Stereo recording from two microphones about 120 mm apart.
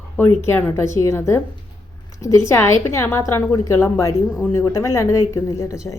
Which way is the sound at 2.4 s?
20° left (ahead or behind).